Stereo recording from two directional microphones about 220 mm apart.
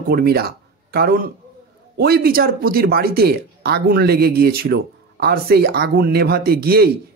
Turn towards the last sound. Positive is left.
turn(degrees=-45)  # may be behind; listen again after turning